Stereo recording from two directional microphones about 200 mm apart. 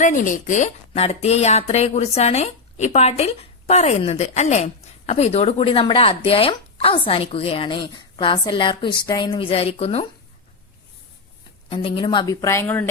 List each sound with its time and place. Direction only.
0.0 s speech: 40° left (ahead or behind)
11.7 s speech: 25° left (ahead or behind)